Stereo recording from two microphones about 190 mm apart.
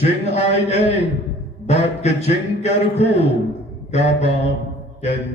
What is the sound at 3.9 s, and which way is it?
Mantra, 35° left (ahead or behind).